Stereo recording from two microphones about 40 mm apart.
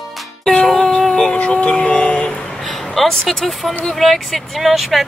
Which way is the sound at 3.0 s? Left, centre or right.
Centre.